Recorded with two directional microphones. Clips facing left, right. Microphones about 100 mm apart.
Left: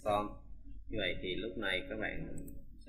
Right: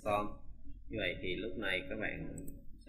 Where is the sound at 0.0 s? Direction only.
5° left (ahead or behind).